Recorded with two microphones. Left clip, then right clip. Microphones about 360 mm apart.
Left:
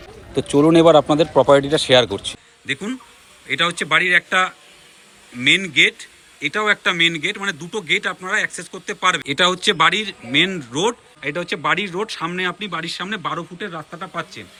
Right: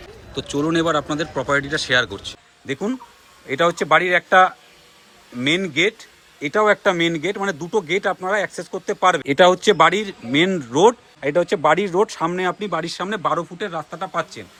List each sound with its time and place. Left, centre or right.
0.3 s a man's voice: centre
2.6 s speech: centre